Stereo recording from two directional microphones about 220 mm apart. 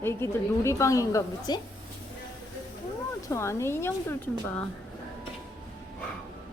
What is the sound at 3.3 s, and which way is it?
A woman's voice, 10° left (ahead or behind).